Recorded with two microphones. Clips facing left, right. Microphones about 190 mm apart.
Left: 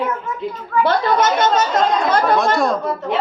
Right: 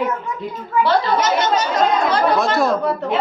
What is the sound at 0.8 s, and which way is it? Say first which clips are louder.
Speech: left 1 dB; 50° left (ahead or behind).